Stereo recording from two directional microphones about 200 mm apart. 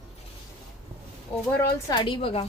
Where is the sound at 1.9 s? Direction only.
25° left (ahead or behind).